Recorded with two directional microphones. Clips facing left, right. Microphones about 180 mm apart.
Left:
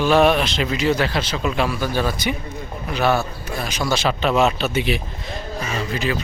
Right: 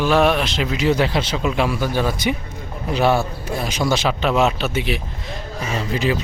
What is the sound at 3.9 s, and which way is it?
Speech, 10° right (ahead or behind).